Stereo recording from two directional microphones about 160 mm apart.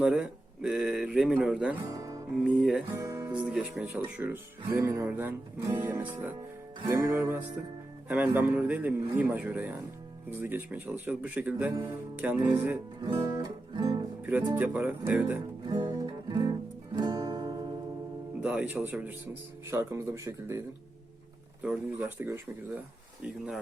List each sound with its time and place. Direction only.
0.0 s speech: 5° right (ahead or behind)
1.9 s music: 20° right (ahead or behind)
2.3 s speech: 5° right (ahead or behind)
2.9 s speech: 20° right (ahead or behind)
3.4 s speech: 5° right (ahead or behind)
13.0 s music: 25° right (ahead or behind)
14.2 s speech: 10° right (ahead or behind)
15.7 s music: 25° right (ahead or behind)
18.3 s speech: 10° right (ahead or behind)
22.2 s speech: 15° right (ahead or behind)